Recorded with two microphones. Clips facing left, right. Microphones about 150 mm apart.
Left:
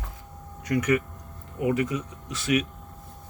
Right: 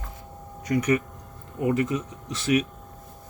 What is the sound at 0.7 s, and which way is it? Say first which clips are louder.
Speech: right 1 dB; 20° right (ahead or behind).